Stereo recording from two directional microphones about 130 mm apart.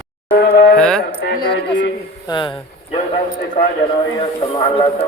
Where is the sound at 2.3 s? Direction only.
40° left (ahead or behind).